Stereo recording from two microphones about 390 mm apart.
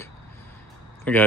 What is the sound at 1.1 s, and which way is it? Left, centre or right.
Speech, centre.